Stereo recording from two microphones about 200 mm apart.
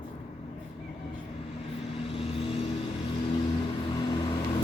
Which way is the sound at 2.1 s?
30° left (ahead or behind).